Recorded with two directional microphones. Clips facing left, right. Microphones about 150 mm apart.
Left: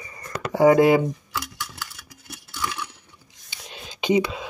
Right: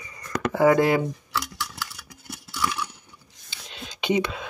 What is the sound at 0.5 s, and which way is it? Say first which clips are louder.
Speech: left 4 dB; 15° left (ahead or behind).